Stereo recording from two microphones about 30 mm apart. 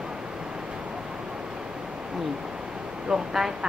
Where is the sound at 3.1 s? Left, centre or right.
Centre.